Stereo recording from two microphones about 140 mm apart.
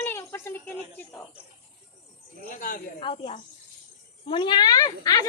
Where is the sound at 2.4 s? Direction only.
75° left (ahead or behind).